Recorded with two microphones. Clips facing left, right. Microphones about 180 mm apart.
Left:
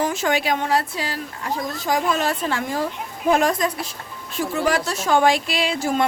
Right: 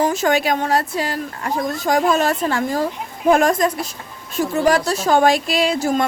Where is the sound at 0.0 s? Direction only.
40° right (ahead or behind).